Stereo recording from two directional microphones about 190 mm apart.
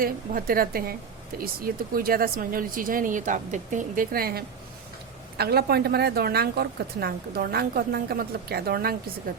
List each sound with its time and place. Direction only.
0.0 s a woman's voice: 50° right (ahead or behind)